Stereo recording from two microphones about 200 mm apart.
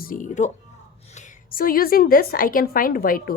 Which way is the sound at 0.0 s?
40° left (ahead or behind).